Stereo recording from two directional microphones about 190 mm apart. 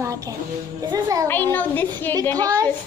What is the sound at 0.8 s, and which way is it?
Music, 20° right (ahead or behind).